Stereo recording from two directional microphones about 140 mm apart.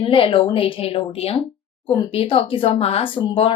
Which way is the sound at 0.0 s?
40° left (ahead or behind).